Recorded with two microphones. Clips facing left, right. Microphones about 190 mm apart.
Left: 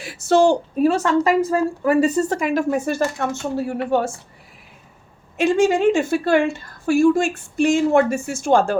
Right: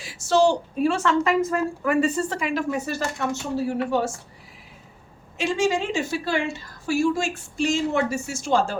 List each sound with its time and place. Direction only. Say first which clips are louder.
0.0 s a woman's voice: left 4 dB; 55° left (ahead or behind)
5.4 s a woman's voice: left 7 dB; 55° left (ahead or behind)